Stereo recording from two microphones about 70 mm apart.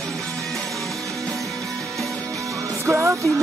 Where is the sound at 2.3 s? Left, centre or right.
Right.